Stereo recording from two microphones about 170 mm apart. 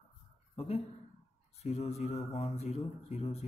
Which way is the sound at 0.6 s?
35° left (ahead or behind).